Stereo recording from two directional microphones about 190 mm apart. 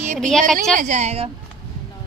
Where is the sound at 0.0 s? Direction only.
40° right (ahead or behind).